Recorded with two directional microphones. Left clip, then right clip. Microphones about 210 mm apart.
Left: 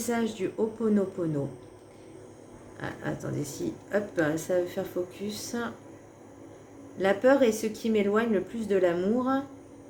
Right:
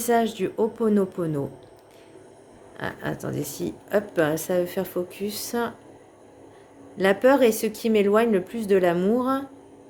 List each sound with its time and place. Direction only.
0.0 s speech: 45° right (ahead or behind)
2.7 s speech: 45° right (ahead or behind)
7.0 s speech: 45° right (ahead or behind)